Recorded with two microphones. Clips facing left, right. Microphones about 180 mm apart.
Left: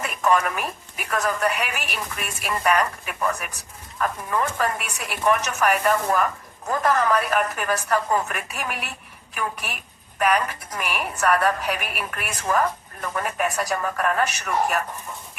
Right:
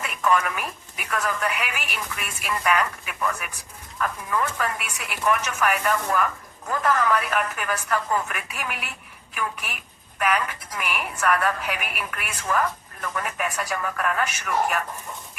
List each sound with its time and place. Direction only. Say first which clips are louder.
0.0 s a woman's voice: left 2 dB; 40° left (ahead or behind)